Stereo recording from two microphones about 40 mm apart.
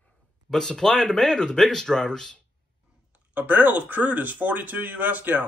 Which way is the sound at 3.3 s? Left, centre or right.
Right.